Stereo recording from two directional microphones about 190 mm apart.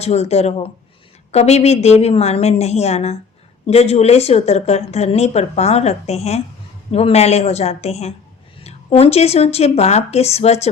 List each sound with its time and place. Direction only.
0.0 s speech: 35° left (ahead or behind)